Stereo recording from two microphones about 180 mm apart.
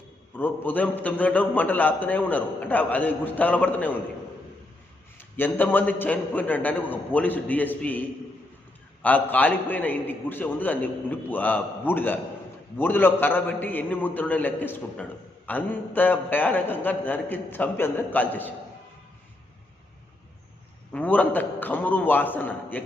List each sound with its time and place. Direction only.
0.3 s a man's voice: 10° left (ahead or behind)
5.1 s a man's voice: 10° left (ahead or behind)
20.9 s a man's voice: 10° left (ahead or behind)